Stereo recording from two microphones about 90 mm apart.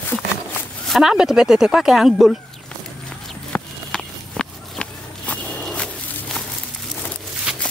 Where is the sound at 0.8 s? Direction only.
5° right (ahead or behind).